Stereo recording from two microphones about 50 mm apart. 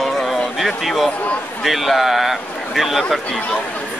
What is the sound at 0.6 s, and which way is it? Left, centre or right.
Speech, centre.